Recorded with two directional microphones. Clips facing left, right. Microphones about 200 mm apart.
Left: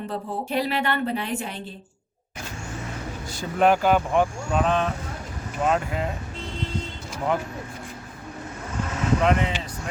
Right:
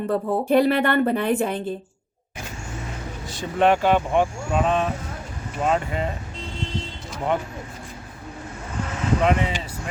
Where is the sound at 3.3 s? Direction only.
Centre (ahead or behind).